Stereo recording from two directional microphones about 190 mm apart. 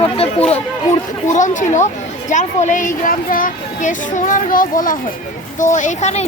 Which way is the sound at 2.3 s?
40° left (ahead or behind).